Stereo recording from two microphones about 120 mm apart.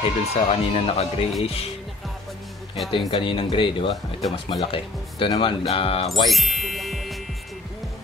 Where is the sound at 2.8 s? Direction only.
45° left (ahead or behind).